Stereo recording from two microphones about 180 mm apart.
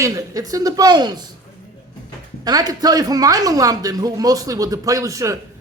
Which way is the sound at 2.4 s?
20° right (ahead or behind).